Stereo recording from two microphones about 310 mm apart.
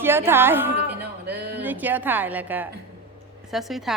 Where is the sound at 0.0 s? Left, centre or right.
Centre.